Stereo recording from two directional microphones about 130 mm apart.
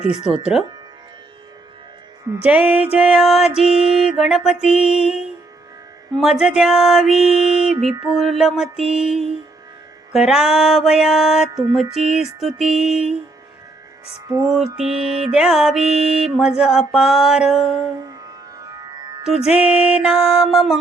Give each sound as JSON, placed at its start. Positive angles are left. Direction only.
{"t": 0.5, "sound": "music", "side_deg": 0}
{"t": 2.4, "sound": "music", "side_deg": -10}
{"t": 14.3, "sound": "music", "side_deg": -25}
{"t": 14.8, "sound": "music", "side_deg": -5}
{"t": 15.9, "sound": "mantra", "side_deg": -50}
{"t": 16.1, "sound": "music", "side_deg": -5}
{"t": 18.0, "sound": "music", "side_deg": -30}
{"t": 19.5, "sound": "music", "side_deg": -10}